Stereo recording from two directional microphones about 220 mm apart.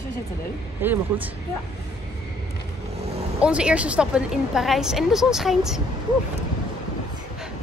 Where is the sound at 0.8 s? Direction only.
10° right (ahead or behind).